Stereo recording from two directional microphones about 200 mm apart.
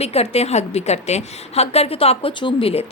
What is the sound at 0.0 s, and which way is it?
A woman's voice, 30° left (ahead or behind).